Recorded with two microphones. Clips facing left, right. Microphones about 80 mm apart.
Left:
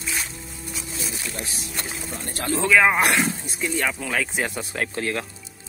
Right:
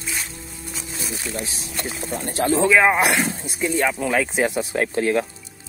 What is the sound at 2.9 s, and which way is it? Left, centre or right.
Speech, centre.